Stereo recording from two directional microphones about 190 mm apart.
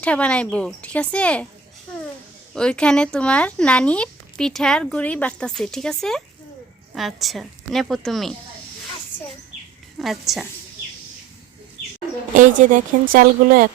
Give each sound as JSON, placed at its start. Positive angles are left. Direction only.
{"t": 0.0, "sound": "a woman's voice", "side_deg": 5}
{"t": 2.6, "sound": "speech", "side_deg": 5}
{"t": 10.0, "sound": "speech", "side_deg": 0}
{"t": 12.3, "sound": "speech", "side_deg": -40}